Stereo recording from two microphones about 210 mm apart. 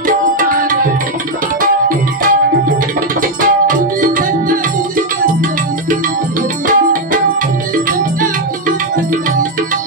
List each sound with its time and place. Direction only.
1.6 s tabla: 40° right (ahead or behind)
3.2 s music: 40° right (ahead or behind)
8.2 s music: 40° right (ahead or behind)